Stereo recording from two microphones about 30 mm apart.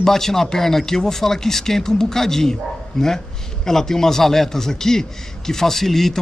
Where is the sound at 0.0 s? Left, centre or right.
Centre.